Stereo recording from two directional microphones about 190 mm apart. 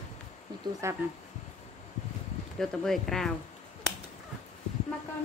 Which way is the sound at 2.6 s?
Centre (ahead or behind).